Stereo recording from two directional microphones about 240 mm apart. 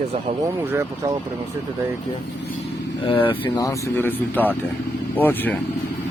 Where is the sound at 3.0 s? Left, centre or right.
Left.